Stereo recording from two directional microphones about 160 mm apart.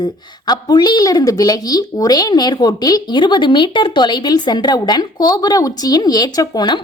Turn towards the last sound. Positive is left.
turn(degrees=25)  # may be behind; listen again after turning